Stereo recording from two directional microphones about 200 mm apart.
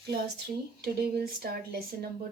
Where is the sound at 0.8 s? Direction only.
50° right (ahead or behind).